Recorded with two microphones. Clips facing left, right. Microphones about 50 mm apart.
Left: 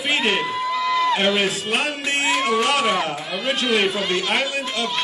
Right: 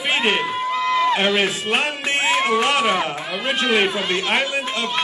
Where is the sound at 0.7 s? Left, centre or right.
Right.